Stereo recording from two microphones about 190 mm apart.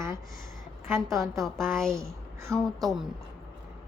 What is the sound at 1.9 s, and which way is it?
Speech, 15° right (ahead or behind).